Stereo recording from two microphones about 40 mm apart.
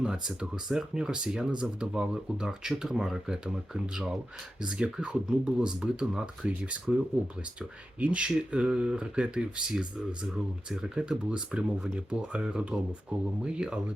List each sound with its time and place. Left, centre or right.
0.0 s speech: centre